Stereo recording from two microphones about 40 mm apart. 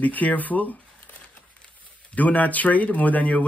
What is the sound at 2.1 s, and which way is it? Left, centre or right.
Speech, left.